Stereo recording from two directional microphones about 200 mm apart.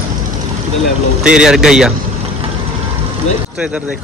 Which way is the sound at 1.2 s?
5° right (ahead or behind).